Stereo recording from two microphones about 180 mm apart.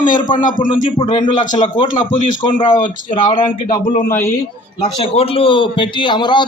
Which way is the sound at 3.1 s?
30° left (ahead or behind).